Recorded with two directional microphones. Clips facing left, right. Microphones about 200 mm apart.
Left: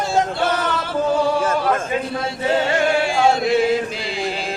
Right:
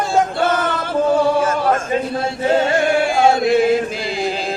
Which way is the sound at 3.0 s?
50° right (ahead or behind).